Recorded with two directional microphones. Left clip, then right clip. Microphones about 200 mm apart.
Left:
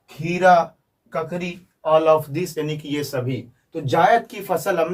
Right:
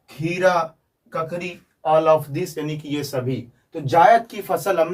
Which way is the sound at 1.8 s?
15° left (ahead or behind).